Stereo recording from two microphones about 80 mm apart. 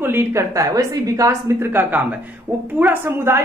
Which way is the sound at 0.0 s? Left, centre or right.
Right.